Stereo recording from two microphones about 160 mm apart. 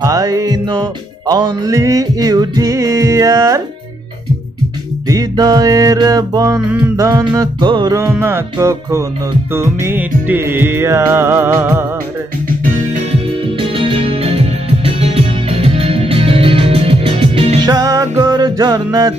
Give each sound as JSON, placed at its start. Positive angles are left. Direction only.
{"t": 0.0, "sound": "music", "side_deg": -20}
{"t": 5.0, "sound": "music", "side_deg": -25}
{"t": 13.6, "sound": "music", "side_deg": -30}
{"t": 17.6, "sound": "music", "side_deg": -25}